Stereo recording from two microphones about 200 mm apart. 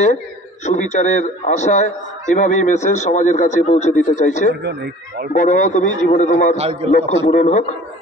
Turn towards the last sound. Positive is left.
turn(degrees=35)  # may be behind; listen again after turning